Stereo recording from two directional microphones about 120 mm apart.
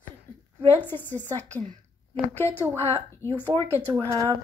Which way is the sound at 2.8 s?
55° right (ahead or behind).